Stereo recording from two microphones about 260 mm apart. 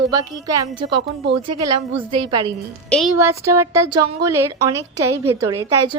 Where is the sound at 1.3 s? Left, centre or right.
Right.